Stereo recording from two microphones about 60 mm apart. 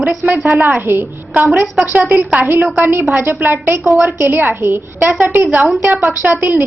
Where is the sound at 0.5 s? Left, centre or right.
Right.